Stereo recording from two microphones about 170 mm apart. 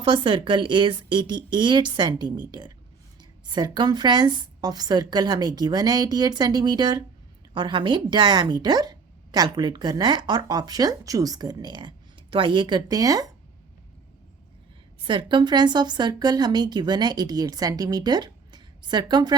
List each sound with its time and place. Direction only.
0.0 s speech: 30° right (ahead or behind)
15.0 s speech: 30° right (ahead or behind)